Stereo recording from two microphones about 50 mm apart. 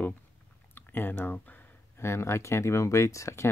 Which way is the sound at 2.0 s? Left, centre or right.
Left.